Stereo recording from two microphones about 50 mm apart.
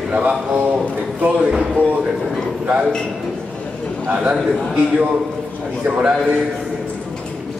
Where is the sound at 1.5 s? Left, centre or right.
Centre.